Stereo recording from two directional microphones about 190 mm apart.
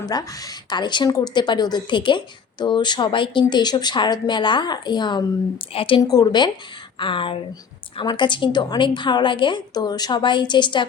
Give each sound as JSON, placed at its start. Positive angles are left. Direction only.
{"t": 0.0, "sound": "a woman's voice", "side_deg": 20}